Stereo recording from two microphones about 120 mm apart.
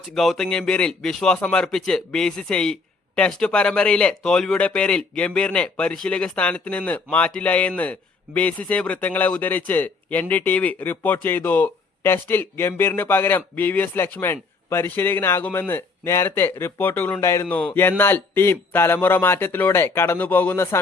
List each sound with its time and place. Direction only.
0.1 s speech: 5° left (ahead or behind)